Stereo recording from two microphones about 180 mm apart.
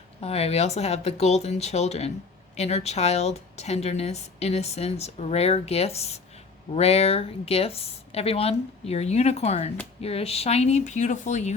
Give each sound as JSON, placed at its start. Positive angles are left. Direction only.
{"t": 0.2, "sound": "speech", "side_deg": 35}